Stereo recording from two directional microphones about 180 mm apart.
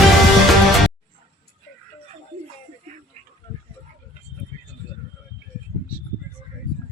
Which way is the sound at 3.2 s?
35° right (ahead or behind).